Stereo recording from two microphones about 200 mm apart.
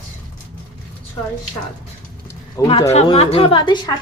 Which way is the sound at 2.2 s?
15° left (ahead or behind).